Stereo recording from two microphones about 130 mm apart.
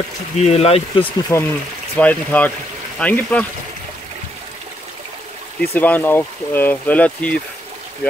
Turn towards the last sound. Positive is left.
turn(degrees=10)  # may be behind; listen again after turning